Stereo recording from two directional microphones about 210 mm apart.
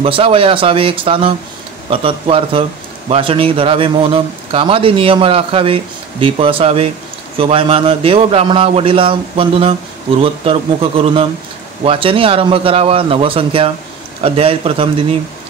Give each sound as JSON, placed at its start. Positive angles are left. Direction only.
{"t": 0.0, "sound": "speech", "side_deg": -25}